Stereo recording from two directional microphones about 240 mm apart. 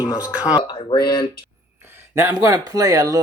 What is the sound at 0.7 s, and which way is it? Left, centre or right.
Speech, left.